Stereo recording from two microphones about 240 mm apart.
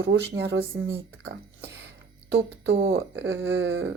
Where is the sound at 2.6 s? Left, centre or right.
Right.